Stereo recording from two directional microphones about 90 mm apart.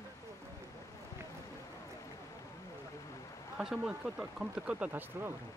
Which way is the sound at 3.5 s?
5° right (ahead or behind).